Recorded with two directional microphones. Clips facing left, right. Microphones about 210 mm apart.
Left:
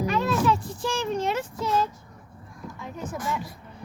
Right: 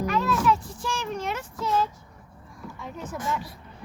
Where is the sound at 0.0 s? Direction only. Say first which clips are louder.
Left 1 dB; 25° left (ahead or behind).